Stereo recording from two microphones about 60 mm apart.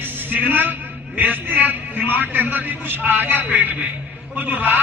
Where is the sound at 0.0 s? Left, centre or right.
Right.